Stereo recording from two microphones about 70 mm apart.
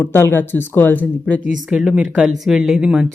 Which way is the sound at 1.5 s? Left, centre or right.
Centre.